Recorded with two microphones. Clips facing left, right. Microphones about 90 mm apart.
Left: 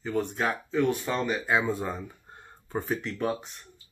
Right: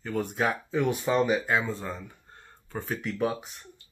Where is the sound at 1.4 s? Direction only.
10° left (ahead or behind).